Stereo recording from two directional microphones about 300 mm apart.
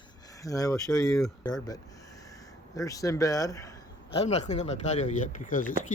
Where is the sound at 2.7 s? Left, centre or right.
Centre.